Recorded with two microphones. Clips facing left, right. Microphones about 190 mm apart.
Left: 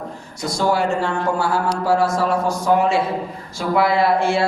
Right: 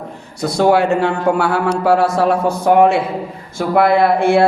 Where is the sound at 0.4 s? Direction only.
60° right (ahead or behind).